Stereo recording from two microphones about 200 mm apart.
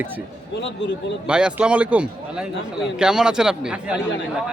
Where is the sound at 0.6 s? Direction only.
60° left (ahead or behind).